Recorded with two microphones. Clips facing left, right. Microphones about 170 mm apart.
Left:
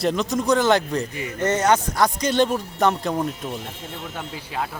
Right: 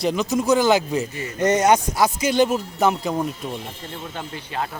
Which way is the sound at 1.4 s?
15° right (ahead or behind).